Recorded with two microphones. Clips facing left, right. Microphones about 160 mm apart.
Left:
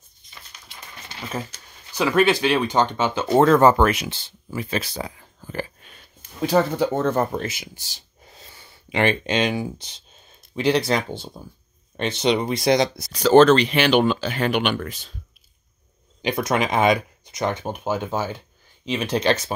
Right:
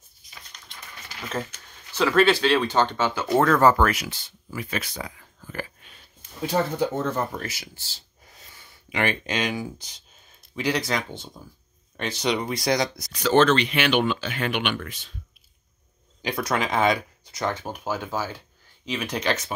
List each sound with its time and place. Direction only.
0.2 s a sound: centre (ahead or behind)
1.5 s a sound: 35° left (ahead or behind)
1.9 s speech: 15° left (ahead or behind); by 5.9 s 30° left (ahead or behind)
6.4 s speech: 75° left (ahead or behind)
7.3 s speech: 20° left (ahead or behind)
8.3 s speech: 30° left (ahead or behind)
16.2 s speech: 20° left (ahead or behind)